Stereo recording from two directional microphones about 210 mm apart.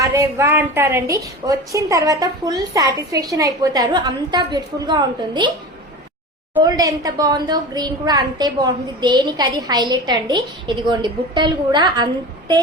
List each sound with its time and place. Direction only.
0.0 s a woman's voice: 15° right (ahead or behind)
6.6 s a woman's voice: 20° right (ahead or behind)